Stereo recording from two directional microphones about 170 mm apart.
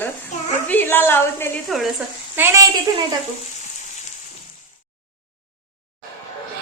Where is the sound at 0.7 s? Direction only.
10° left (ahead or behind).